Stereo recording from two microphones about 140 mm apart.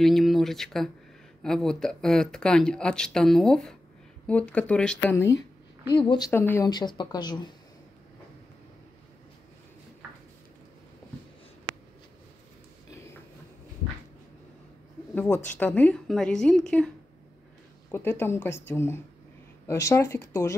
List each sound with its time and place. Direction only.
0.0 s speech: centre (ahead or behind)
5.0 s speech: 20° left (ahead or behind)
5.9 s speech: 35° left (ahead or behind)
6.3 s speech: 15° left (ahead or behind)
6.7 s speech: 30° left (ahead or behind)
12.9 s a sound: 20° left (ahead or behind)
15.1 s speech: 10° left (ahead or behind)
17.9 s speech: 15° left (ahead or behind)